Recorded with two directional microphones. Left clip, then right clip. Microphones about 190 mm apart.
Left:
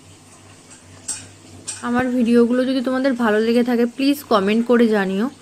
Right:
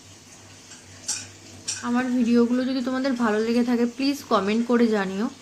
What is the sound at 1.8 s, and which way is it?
A woman's voice, 30° left (ahead or behind).